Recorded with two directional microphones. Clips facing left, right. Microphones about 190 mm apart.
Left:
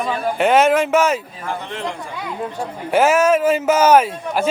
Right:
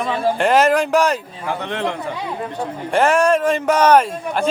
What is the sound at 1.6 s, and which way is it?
Speech, 65° right (ahead or behind).